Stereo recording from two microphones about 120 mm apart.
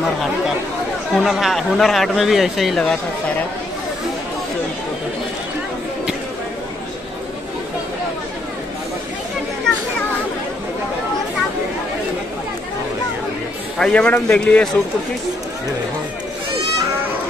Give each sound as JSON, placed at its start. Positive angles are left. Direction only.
{"t": 1.1, "sound": "speech", "side_deg": 0}
{"t": 13.7, "sound": "speech", "side_deg": 5}